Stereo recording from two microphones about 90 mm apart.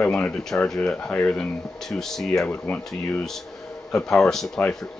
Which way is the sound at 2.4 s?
15° left (ahead or behind).